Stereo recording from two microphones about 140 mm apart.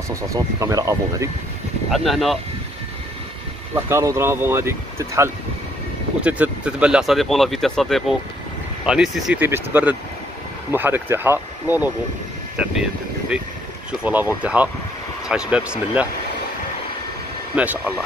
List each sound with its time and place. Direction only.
0.1 s speech: 25° right (ahead or behind)
1.9 s speech: centre (ahead or behind)
3.7 s speech: 20° right (ahead or behind)
6.2 s speech: 10° right (ahead or behind)
17.6 s speech: 10° right (ahead or behind)